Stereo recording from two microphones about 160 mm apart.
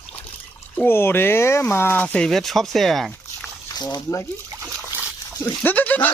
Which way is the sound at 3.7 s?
25° left (ahead or behind).